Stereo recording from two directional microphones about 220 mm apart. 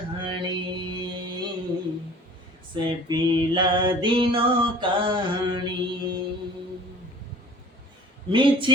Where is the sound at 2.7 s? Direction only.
20° right (ahead or behind).